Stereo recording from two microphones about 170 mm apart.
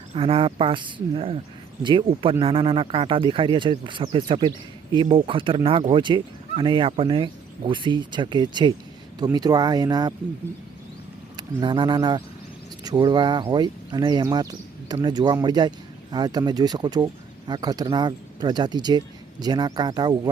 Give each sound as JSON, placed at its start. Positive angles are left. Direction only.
{"t": 0.1, "sound": "speech", "side_deg": -30}
{"t": 11.3, "sound": "speech", "side_deg": -25}